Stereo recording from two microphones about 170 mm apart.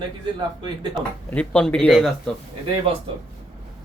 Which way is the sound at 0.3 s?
25° right (ahead or behind).